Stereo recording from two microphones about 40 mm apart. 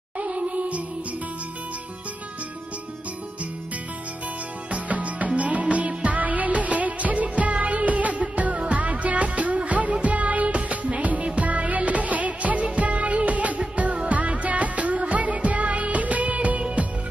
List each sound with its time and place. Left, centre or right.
0.2 s music: right
4.6 s music: right